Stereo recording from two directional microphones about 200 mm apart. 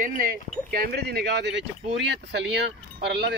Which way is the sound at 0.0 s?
45° right (ahead or behind).